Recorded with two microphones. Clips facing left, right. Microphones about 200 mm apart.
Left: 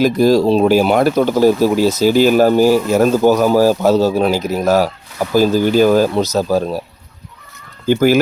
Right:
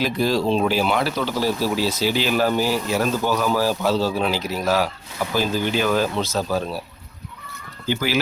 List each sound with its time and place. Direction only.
0.0 s speech: 45° left (ahead or behind)
7.9 s speech: 50° left (ahead or behind)